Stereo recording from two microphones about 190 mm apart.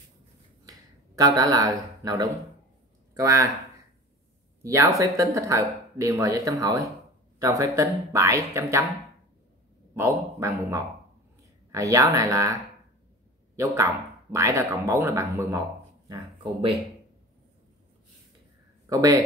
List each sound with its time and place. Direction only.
0.7 s a sound: 20° right (ahead or behind)
3.2 s speech: 15° right (ahead or behind)
4.6 s speech: 15° right (ahead or behind)
9.9 s speech: 15° right (ahead or behind)
14.3 s speech: 15° right (ahead or behind)
18.9 s speech: 20° right (ahead or behind)